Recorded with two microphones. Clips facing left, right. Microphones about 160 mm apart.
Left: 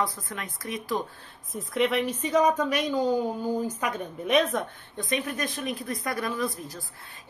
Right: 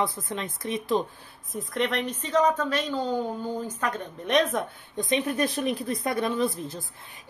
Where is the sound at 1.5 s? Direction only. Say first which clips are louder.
Left 2 dB; 5° left (ahead or behind).